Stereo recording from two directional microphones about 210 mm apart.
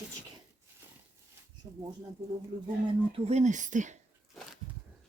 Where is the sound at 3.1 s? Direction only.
30° right (ahead or behind).